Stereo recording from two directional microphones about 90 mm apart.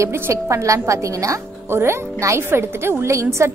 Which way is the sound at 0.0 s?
30° right (ahead or behind).